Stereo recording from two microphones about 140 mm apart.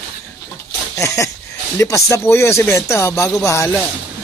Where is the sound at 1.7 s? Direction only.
20° left (ahead or behind).